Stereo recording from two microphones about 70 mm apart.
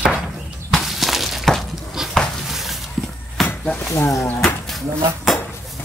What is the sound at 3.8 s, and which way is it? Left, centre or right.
Speech, left.